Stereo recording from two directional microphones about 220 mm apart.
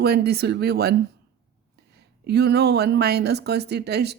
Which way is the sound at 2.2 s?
50° right (ahead or behind).